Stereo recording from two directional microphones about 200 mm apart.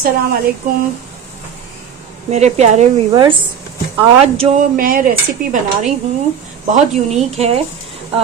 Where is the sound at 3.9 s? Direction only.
30° right (ahead or behind).